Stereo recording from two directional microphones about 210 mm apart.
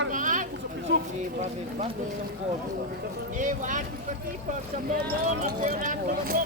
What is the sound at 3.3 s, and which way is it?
Speech, 40° right (ahead or behind).